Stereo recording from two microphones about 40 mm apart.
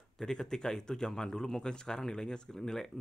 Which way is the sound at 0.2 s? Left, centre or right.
Centre.